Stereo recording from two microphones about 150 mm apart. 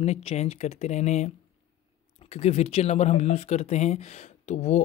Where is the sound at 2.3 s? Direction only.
45° left (ahead or behind).